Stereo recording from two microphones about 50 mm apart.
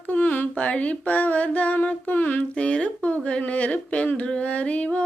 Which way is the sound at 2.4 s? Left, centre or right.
Left.